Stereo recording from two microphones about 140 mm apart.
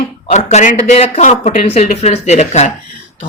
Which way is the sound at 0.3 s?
55° left (ahead or behind).